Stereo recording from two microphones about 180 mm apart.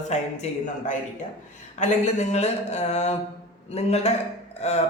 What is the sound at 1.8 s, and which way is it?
A man's voice, 40° left (ahead or behind).